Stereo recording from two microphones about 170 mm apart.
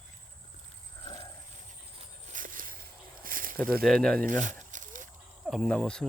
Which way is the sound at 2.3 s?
50° right (ahead or behind).